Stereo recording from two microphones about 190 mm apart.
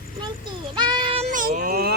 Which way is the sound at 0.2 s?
25° right (ahead or behind).